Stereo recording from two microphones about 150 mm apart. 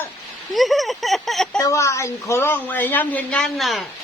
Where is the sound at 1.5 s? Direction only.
25° left (ahead or behind); by 3.8 s centre (ahead or behind).